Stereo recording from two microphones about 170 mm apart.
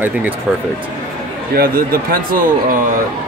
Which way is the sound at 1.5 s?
60° right (ahead or behind).